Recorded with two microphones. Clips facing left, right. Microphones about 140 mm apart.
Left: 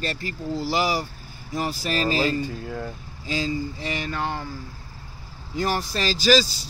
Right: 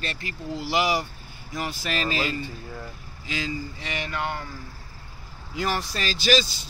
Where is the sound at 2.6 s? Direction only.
55° left (ahead or behind).